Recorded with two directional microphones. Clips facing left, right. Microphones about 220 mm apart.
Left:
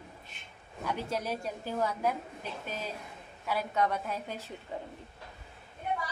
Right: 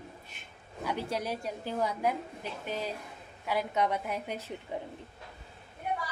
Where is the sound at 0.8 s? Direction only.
10° right (ahead or behind).